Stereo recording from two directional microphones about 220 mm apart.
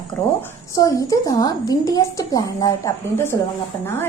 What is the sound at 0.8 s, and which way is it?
A woman's voice, 15° left (ahead or behind).